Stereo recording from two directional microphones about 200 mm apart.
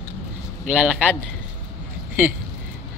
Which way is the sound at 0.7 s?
5° right (ahead or behind).